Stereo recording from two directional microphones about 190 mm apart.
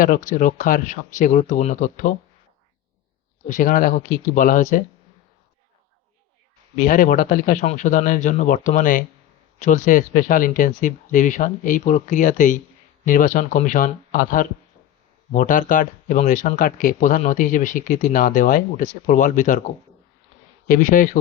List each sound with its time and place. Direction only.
0.0 s speech: 45° left (ahead or behind)
3.4 s speech: 45° left (ahead or behind)
6.7 s speech: 45° left (ahead or behind)
20.7 s speech: 45° left (ahead or behind)